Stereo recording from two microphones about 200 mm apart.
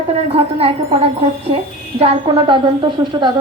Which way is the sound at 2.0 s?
25° right (ahead or behind).